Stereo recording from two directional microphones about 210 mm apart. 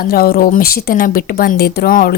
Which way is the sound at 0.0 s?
45° left (ahead or behind).